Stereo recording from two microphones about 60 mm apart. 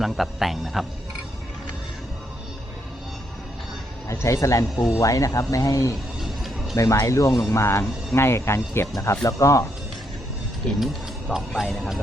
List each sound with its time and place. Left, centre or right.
0.0 s speech: centre
4.1 s speech: left
6.1 s music: centre
6.7 s speech: left
7.4 s speech: left
9.2 s speech: left
10.8 s speech: centre